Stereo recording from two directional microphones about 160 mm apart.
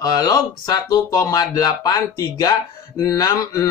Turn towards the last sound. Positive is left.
turn(degrees=20)  # may be behind; listen again after turning